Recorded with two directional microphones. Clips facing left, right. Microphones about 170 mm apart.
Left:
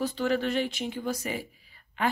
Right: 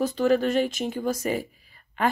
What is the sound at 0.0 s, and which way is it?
Speech, 45° right (ahead or behind).